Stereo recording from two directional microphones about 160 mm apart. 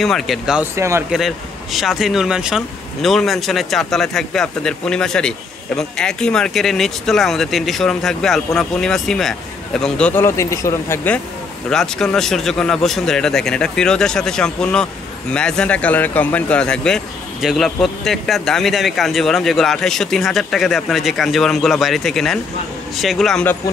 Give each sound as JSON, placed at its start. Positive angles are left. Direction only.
{"t": 0.0, "sound": "speech", "side_deg": 0}
{"t": 0.7, "sound": "speech", "side_deg": -15}
{"t": 1.1, "sound": "speech", "side_deg": 0}
{"t": 11.7, "sound": "speech", "side_deg": 5}